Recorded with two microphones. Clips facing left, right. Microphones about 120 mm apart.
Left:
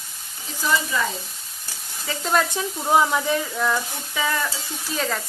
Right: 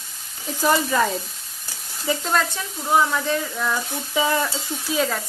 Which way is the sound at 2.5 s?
20° left (ahead or behind).